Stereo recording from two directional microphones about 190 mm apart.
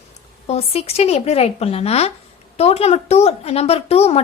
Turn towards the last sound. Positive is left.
turn(degrees=35)  # may be behind; listen again after turning